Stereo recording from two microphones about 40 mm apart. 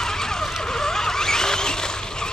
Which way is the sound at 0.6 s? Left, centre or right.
Centre.